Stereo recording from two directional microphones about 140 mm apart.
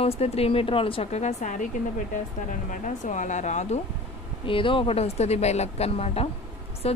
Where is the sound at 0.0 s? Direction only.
45° left (ahead or behind).